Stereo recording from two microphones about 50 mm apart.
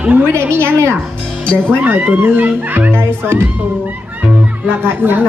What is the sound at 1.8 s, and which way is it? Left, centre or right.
A child's voice, right.